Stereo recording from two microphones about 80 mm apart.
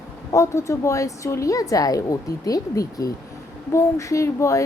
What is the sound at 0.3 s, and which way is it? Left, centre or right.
Speech, left.